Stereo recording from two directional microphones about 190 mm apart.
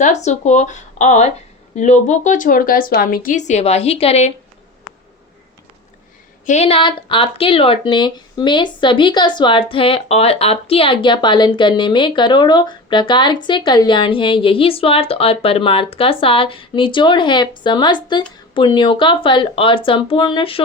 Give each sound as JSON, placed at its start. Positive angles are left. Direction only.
{"t": 0.0, "sound": "a woman's voice", "side_deg": 40}
{"t": 6.4, "sound": "speech", "side_deg": 35}